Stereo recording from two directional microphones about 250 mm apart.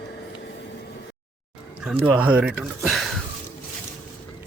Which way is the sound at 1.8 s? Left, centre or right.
Centre.